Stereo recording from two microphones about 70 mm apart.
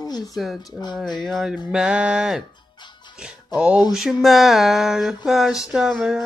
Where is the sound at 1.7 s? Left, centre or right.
Centre.